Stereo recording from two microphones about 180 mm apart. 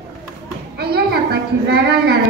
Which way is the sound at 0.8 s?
60° right (ahead or behind).